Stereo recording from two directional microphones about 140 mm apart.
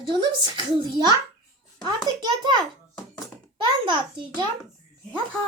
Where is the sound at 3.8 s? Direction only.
35° right (ahead or behind).